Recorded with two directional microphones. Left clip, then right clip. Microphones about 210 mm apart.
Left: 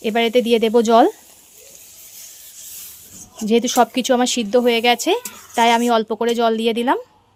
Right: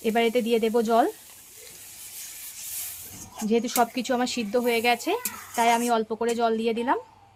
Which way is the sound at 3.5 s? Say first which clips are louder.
Left 8 dB; 40° left (ahead or behind).